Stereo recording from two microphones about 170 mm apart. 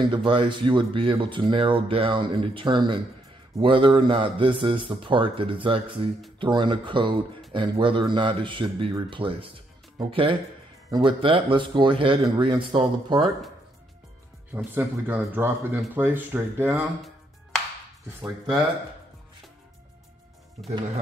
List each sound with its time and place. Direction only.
0.0 s speech: 30° right (ahead or behind)
14.7 s speech: 10° right (ahead or behind)